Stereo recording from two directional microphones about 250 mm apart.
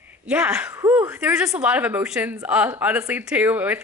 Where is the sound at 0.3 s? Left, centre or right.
Centre.